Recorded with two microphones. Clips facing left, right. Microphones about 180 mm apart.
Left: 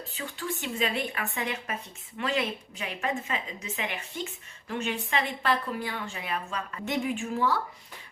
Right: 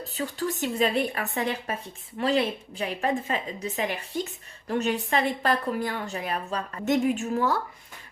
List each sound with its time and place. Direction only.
0.0 s a woman's voice: 40° right (ahead or behind)